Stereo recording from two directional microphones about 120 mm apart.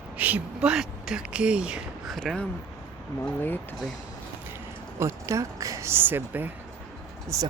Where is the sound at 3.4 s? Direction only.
15° left (ahead or behind).